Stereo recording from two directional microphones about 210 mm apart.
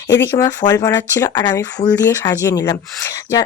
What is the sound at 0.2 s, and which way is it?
Speech, 15° left (ahead or behind).